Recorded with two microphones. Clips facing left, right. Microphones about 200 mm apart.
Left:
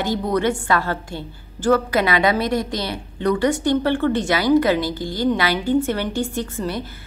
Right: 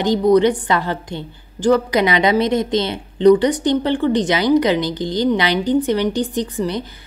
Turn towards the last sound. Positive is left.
turn(degrees=-15)  # may be behind; listen again after turning